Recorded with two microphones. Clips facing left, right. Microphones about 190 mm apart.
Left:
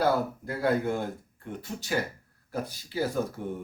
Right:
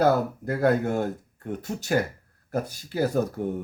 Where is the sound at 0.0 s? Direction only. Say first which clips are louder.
Right 4 dB; 45° right (ahead or behind).